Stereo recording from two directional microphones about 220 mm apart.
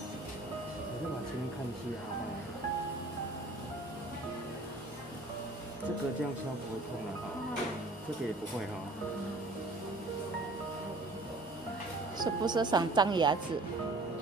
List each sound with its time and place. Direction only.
12.2 s a woman's voice: 20° right (ahead or behind)